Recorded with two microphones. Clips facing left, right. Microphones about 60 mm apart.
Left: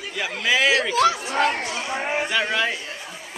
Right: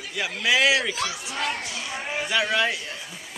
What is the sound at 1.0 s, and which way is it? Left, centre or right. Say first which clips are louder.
Speech: left 10 dB; left.